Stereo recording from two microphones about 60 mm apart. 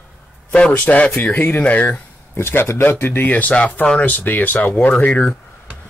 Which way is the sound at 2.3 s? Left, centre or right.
Left.